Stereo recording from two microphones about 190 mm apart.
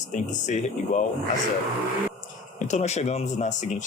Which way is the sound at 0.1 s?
40° left (ahead or behind).